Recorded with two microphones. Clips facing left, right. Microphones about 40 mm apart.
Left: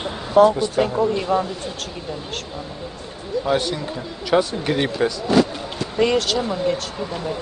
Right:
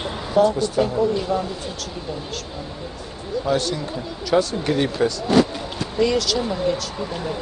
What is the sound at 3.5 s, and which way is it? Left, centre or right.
Speech, left.